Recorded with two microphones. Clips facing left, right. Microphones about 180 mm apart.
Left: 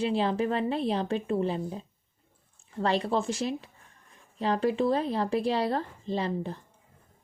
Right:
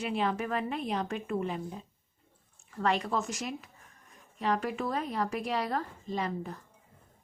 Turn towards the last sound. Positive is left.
turn(degrees=30)  # may be behind; listen again after turning